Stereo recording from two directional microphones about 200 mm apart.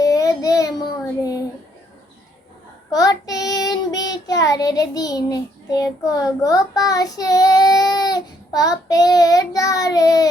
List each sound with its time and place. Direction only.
0.0 s child singing: 15° left (ahead or behind)
1.2 s a sound: 15° left (ahead or behind)
2.9 s child singing: 20° left (ahead or behind)